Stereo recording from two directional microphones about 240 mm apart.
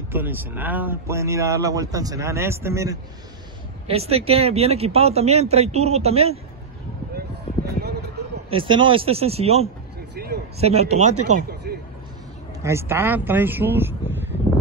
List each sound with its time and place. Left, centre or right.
0.1 s speech: centre
3.8 s a man's voice: right
7.2 s a sound: right
8.5 s a man's voice: right
10.1 s vehicle: right
10.6 s a man's voice: right
12.6 s speech: centre